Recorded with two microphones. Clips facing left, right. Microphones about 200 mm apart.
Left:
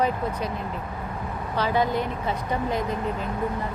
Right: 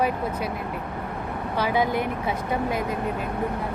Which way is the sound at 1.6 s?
10° right (ahead or behind).